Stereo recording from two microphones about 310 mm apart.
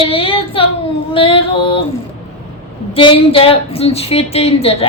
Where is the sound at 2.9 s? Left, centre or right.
Centre.